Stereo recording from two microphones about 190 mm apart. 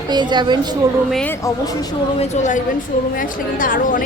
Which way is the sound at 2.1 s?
35° left (ahead or behind).